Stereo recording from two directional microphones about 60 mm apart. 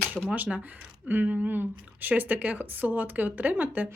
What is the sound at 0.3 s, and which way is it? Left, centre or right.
A woman's voice, right.